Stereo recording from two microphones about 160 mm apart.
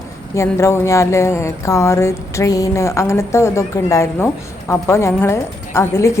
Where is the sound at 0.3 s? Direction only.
15° left (ahead or behind).